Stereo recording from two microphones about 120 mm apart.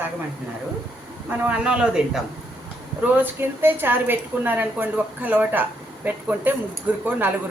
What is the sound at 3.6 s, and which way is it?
A woman's voice, 15° right (ahead or behind).